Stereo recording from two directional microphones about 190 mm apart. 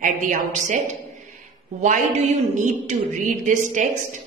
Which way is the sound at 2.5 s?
40° right (ahead or behind).